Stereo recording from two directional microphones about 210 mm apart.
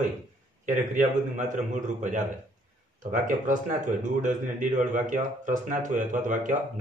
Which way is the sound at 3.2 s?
35° right (ahead or behind).